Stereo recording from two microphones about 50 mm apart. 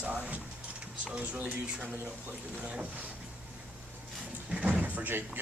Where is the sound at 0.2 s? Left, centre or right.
Right.